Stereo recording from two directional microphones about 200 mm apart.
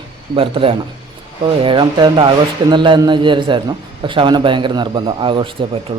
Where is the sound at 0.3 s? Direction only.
25° right (ahead or behind).